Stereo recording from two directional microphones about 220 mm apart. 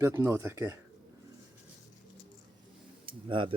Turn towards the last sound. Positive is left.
turn(degrees=-25)  # may be behind; listen again after turning